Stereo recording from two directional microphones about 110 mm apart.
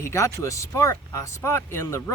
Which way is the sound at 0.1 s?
25° left (ahead or behind).